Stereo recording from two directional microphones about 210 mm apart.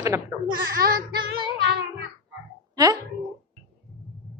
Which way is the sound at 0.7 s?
45° right (ahead or behind).